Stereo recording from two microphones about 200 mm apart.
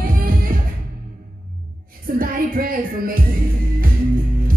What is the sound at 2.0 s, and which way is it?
Music, 45° right (ahead or behind).